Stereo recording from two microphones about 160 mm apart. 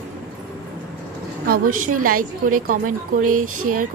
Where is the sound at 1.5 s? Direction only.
60° right (ahead or behind).